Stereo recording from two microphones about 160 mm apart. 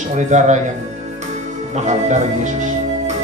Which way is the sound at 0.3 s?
45° right (ahead or behind).